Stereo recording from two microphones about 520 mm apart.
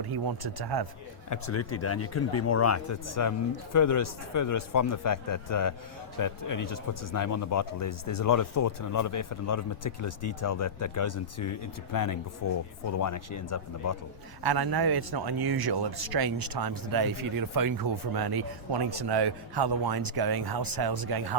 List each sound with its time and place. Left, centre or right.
0.1 s speech: right
1.3 s speech: left
14.4 s speech: right